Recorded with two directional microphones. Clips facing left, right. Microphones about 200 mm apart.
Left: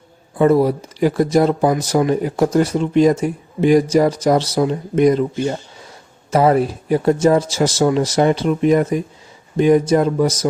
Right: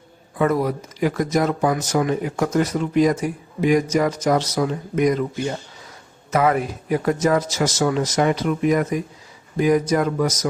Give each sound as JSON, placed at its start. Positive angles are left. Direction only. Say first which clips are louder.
{"t": 0.3, "sound": "speech", "louder": "left 6 dB", "side_deg": 30}